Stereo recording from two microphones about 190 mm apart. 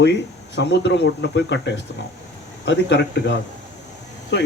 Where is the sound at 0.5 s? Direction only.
65° left (ahead or behind).